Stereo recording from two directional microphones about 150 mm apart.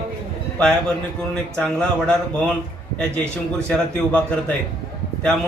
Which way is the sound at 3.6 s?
5° left (ahead or behind).